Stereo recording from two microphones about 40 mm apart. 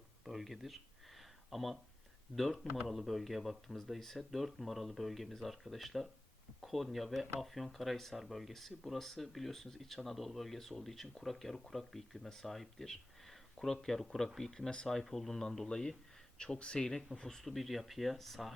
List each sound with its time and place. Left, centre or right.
0.3 s speech: centre; by 17.0 s left
17.2 s speech: centre